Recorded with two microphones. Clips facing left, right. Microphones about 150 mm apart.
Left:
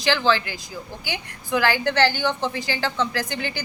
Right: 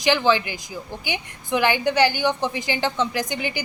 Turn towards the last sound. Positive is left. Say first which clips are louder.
# right 2 dB
turn(degrees=-15)  # may be behind; listen again after turning